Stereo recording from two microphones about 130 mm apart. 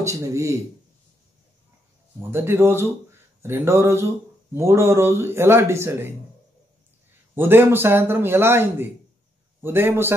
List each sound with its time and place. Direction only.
0.0 s speech: 20° right (ahead or behind)
2.3 s a man's voice: 20° right (ahead or behind)
7.3 s a man's voice: 15° right (ahead or behind)